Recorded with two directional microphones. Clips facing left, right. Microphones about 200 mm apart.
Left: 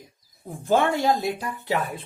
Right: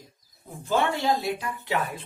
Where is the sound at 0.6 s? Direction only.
45° left (ahead or behind).